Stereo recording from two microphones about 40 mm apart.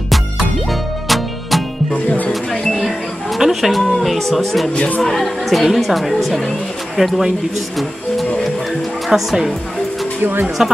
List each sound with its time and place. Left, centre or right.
0.7 s music: centre
3.3 s speech: centre
9.1 s speech: centre
10.6 s a woman's voice: centre